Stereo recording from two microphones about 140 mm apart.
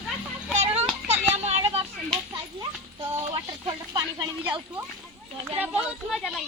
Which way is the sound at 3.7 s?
30° right (ahead or behind).